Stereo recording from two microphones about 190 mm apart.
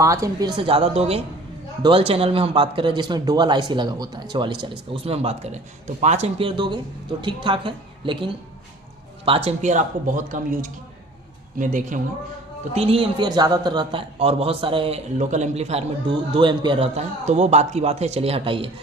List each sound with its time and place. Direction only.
0.0 s a man's voice: 15° right (ahead or behind); by 11.9 s 40° right (ahead or behind)
12.7 s a man's voice: 30° right (ahead or behind)